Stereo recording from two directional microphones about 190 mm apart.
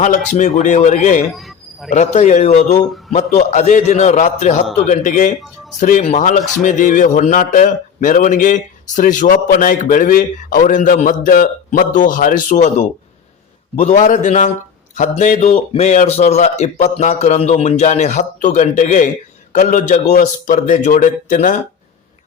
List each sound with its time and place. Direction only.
0.3 s a man's voice: 40° left (ahead or behind)
1.3 s a sound: centre (ahead or behind)
1.9 s a man's voice: 35° left (ahead or behind)